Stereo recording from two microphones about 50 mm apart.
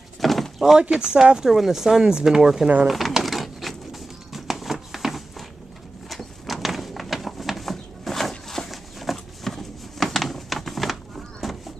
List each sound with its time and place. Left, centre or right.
0.2 s door: centre
0.7 s speech: centre
2.9 s bird: centre
6.0 s a sound: centre